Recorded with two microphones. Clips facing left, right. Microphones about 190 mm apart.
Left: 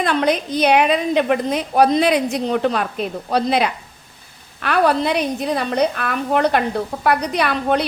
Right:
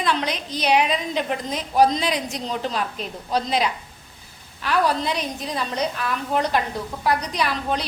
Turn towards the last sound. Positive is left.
turn(degrees=60)  # may be behind; listen again after turning